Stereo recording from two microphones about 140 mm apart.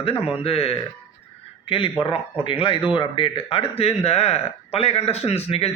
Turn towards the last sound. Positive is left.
turn(degrees=45)  # may be behind; listen again after turning